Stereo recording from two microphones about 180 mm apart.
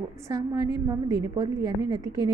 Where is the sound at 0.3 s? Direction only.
20° right (ahead or behind).